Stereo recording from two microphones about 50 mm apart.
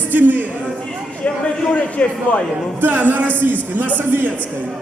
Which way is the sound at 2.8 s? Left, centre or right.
Right.